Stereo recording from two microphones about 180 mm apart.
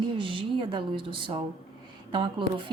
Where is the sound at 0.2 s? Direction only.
30° right (ahead or behind).